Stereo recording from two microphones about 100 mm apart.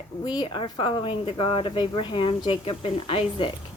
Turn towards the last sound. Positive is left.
turn(degrees=70)  # may be behind; listen again after turning